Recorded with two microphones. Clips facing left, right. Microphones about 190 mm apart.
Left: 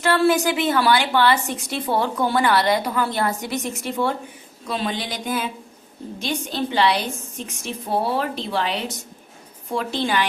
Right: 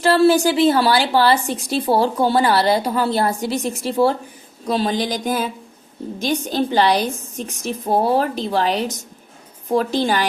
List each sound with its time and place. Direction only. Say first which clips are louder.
0.0 s a woman's voice: right 4 dB; 30° right (ahead or behind)